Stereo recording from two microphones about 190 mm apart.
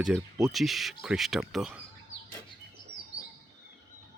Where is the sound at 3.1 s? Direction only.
65° right (ahead or behind).